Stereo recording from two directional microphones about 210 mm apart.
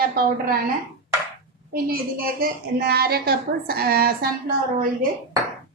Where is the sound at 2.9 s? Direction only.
50° right (ahead or behind).